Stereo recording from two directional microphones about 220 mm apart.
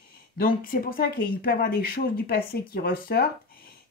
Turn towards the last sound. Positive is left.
turn(degrees=40)  # may be behind; listen again after turning